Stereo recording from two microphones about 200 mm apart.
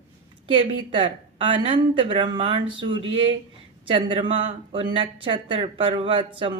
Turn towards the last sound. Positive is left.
turn(degrees=-25)  # may be behind; listen again after turning